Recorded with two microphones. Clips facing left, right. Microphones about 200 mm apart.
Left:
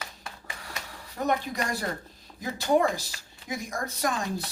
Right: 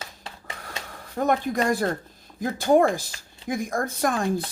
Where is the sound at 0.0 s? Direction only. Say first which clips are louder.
Right 2 dB; 25° right (ahead or behind).